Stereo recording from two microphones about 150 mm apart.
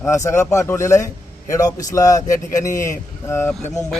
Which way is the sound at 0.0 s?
20° left (ahead or behind).